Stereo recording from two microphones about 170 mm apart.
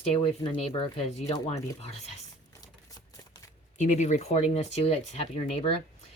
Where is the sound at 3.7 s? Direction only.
45° left (ahead or behind).